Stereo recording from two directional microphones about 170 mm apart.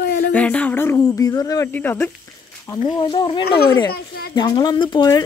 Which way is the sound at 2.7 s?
25° left (ahead or behind).